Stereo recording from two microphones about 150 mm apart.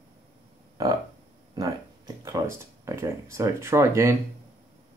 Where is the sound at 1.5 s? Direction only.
20° right (ahead or behind).